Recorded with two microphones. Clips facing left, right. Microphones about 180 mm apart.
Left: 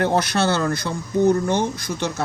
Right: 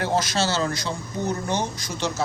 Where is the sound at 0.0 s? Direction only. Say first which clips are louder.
Left 4 dB; 60° left (ahead or behind).